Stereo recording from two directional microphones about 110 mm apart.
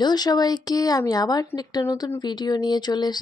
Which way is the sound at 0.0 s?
40° left (ahead or behind).